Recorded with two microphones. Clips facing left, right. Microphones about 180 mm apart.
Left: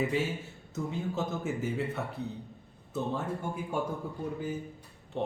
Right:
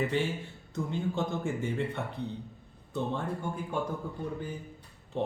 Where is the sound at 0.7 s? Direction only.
5° left (ahead or behind).